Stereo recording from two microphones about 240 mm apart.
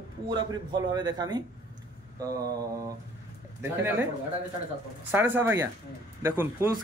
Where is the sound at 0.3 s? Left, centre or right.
Centre.